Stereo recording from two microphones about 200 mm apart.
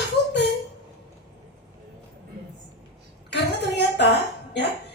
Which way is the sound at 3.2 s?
60° left (ahead or behind).